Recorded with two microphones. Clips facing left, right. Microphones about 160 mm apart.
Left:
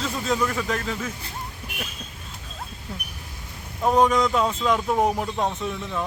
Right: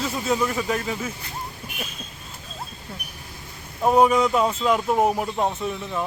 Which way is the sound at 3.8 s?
10° right (ahead or behind).